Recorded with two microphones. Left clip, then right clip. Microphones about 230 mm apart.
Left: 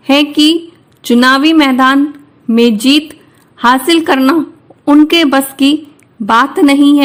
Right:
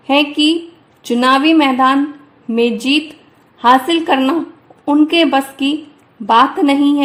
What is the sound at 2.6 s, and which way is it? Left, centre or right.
Speech, left.